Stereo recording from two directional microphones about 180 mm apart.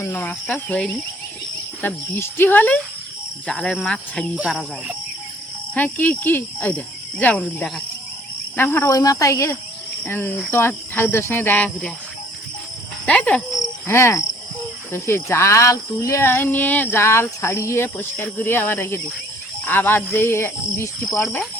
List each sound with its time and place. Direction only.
0.0 s speech: 10° left (ahead or behind)
4.4 s speech: 5° right (ahead or behind)
5.7 s speech: 10° left (ahead or behind)
13.1 s insect: 5° left (ahead or behind)
14.9 s speech: 15° left (ahead or behind)